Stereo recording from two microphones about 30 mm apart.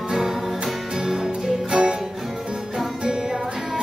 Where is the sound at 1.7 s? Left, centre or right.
Right.